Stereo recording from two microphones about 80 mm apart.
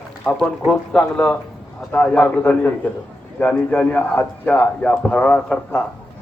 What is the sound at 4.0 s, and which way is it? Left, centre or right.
Speech, left.